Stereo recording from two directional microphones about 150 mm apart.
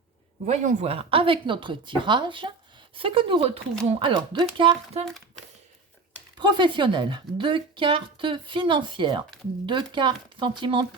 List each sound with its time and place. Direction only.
0.4 s speech: 50° right (ahead or behind); by 4.8 s 30° right (ahead or behind)
6.4 s speech: 30° right (ahead or behind)